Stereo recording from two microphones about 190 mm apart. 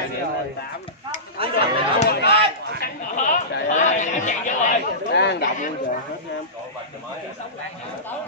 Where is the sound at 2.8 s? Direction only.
45° left (ahead or behind).